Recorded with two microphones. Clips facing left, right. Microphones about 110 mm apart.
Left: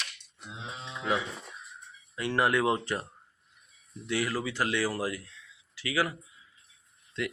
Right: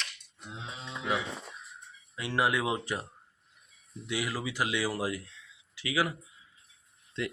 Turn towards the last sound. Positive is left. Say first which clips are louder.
# left 1 dB
turn(degrees=-20)  # may be behind; listen again after turning